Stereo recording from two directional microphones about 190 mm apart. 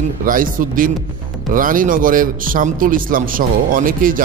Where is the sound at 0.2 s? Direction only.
45° right (ahead or behind).